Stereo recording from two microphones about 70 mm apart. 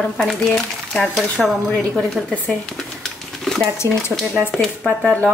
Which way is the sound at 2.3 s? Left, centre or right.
Centre.